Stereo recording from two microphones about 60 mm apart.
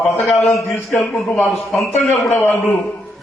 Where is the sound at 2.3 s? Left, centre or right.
Left.